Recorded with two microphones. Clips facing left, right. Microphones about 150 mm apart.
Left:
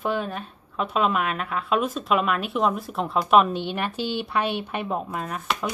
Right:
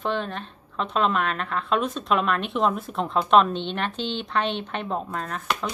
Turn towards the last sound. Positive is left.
turn(degrees=5)  # may be behind; listen again after turning